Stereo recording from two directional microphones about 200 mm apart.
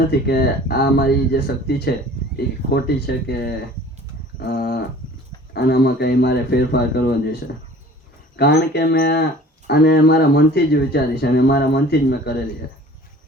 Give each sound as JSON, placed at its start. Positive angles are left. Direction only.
{"t": 0.1, "sound": "speech", "side_deg": 50}
{"t": 4.4, "sound": "livestock", "side_deg": 50}
{"t": 5.5, "sound": "speech", "side_deg": 55}
{"t": 8.4, "sound": "speech", "side_deg": 55}